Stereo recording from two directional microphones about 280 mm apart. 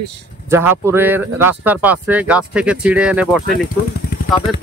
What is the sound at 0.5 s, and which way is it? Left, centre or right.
Speech, centre.